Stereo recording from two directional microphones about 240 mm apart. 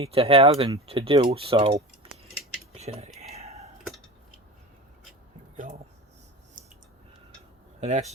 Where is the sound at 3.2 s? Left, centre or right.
Right.